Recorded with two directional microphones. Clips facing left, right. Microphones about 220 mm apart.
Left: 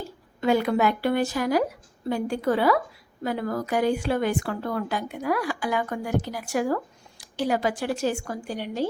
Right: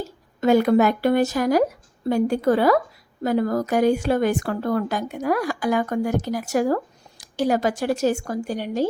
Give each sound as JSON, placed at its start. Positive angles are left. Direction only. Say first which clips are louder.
{"t": 0.4, "sound": "a woman's voice", "louder": "right 5 dB", "side_deg": -45}